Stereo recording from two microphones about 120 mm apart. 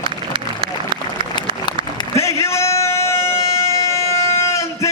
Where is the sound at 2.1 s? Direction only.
25° left (ahead or behind).